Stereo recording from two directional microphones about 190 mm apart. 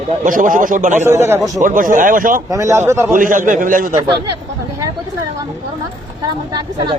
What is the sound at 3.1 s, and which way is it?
Speech, 45° right (ahead or behind).